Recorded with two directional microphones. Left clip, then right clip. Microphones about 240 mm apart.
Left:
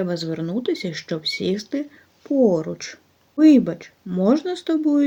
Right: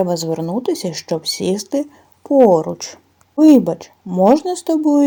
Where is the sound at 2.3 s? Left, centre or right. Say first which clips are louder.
Right 8 dB; right.